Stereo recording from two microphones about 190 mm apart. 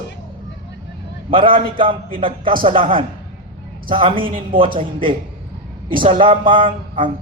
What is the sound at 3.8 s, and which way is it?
A man's voice, 25° right (ahead or behind).